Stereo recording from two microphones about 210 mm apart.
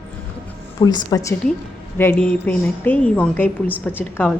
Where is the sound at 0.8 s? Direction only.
25° left (ahead or behind); by 4.4 s 10° left (ahead or behind).